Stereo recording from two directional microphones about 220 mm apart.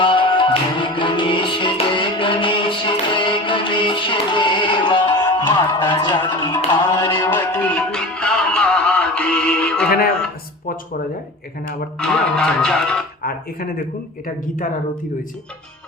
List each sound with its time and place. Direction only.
0.0 s music: 20° left (ahead or behind)
7.3 s music: 10° left (ahead or behind)
11.9 s music: 5° left (ahead or behind)
13.2 s speech: 40° left (ahead or behind)